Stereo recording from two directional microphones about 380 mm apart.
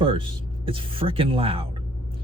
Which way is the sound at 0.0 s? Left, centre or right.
Centre.